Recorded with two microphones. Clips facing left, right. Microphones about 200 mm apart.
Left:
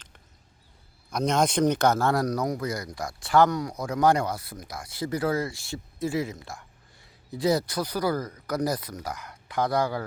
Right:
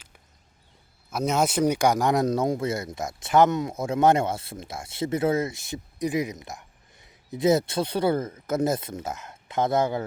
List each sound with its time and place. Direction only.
1.1 s speech: 5° right (ahead or behind); by 10.1 s 25° right (ahead or behind)